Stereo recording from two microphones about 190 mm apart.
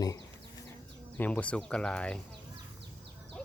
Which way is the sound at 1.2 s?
5° left (ahead or behind).